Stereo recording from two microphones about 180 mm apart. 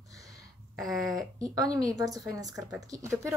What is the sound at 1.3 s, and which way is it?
Speech, 20° right (ahead or behind).